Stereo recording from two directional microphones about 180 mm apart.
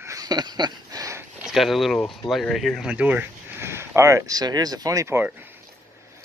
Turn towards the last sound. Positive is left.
turn(degrees=-15)  # may be behind; listen again after turning